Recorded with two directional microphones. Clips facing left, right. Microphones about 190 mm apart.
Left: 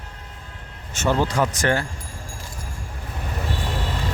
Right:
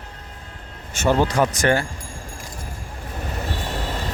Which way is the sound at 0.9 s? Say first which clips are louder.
Right 2 dB; 15° right (ahead or behind).